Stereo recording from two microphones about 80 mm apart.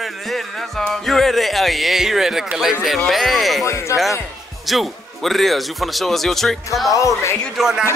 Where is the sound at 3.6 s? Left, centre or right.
Left.